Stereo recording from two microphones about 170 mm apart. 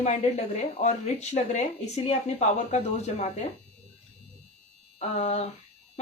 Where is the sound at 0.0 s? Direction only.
45° left (ahead or behind).